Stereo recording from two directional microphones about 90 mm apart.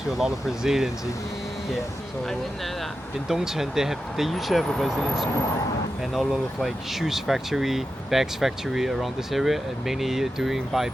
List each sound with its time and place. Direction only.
0.2 s speech: 5° right (ahead or behind)
3.2 s speech: 5° right (ahead or behind)